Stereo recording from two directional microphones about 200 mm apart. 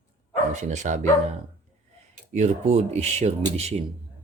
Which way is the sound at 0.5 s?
35° right (ahead or behind).